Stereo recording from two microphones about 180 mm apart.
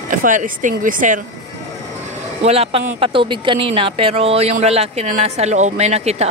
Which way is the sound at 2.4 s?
35° right (ahead or behind).